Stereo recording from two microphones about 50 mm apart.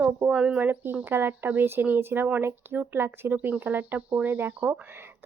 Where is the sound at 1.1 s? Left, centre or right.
Right.